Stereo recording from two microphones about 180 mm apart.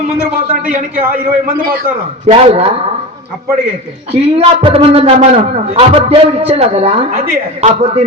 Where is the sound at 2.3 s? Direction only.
35° right (ahead or behind).